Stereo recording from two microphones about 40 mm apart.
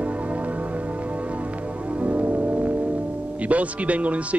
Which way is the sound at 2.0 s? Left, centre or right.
Right.